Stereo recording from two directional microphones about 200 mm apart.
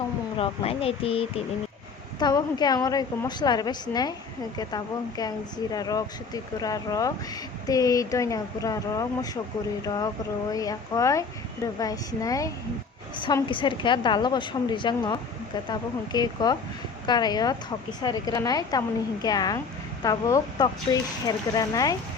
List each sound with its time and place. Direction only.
0.3 s a woman's voice: 30° left (ahead or behind)